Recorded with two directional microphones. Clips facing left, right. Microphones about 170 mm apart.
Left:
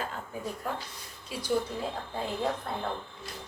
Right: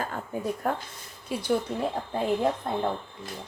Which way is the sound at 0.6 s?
60° right (ahead or behind).